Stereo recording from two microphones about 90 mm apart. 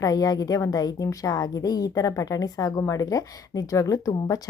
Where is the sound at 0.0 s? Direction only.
45° left (ahead or behind).